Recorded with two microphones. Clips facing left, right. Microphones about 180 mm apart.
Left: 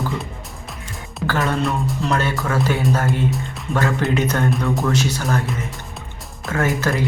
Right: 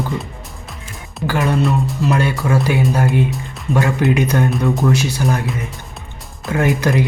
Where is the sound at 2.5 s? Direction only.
15° right (ahead or behind).